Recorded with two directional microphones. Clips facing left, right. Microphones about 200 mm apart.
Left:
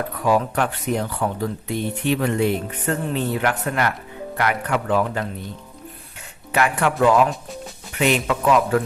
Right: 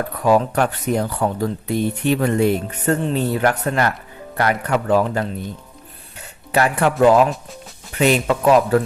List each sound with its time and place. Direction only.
0.3 s speech: 40° right (ahead or behind)
6.5 s speech: 35° right (ahead or behind)